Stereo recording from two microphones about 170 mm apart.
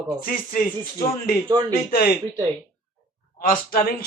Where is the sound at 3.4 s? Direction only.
60° left (ahead or behind).